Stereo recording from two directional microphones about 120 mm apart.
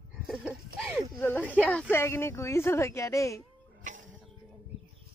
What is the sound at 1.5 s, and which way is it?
Speech, 10° left (ahead or behind).